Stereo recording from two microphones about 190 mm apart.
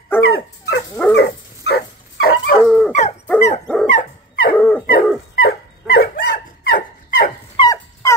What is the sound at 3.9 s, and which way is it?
Dog, 45° left (ahead or behind).